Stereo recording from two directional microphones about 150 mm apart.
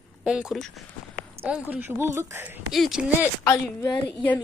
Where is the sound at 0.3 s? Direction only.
5° right (ahead or behind).